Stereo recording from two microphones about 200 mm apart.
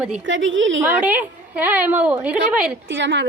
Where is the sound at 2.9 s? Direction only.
65° right (ahead or behind).